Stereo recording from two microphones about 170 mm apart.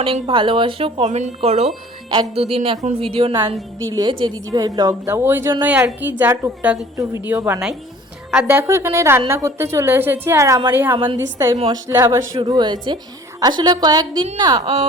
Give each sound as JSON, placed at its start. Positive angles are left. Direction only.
{"t": 0.0, "sound": "a woman's voice", "side_deg": -30}
{"t": 6.9, "sound": "a woman's voice", "side_deg": -20}
{"t": 10.9, "sound": "speech", "side_deg": -30}
{"t": 11.7, "sound": "a woman's voice", "side_deg": -15}
{"t": 12.4, "sound": "a woman's voice", "side_deg": -25}